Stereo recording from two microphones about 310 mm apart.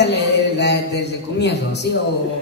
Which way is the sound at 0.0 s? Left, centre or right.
Left.